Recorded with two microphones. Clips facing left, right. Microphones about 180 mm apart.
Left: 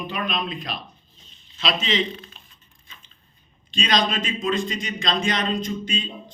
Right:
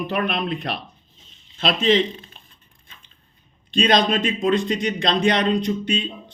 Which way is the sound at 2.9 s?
55° right (ahead or behind).